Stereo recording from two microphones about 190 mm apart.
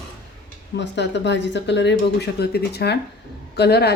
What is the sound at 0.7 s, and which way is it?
A woman's voice, 65° left (ahead or behind).